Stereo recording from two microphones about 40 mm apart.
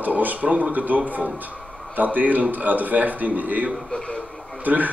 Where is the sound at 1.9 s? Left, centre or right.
Right.